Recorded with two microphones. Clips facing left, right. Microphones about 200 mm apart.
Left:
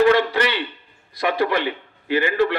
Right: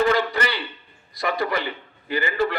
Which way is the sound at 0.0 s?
75° left (ahead or behind).